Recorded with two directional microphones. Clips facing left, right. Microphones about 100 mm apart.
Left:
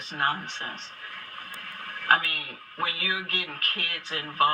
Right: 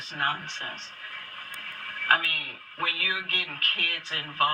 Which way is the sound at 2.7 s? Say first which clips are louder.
Left 1 dB; 20° left (ahead or behind).